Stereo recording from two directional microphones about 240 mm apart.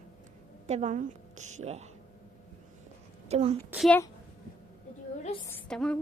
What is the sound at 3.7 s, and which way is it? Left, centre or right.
Speech, centre.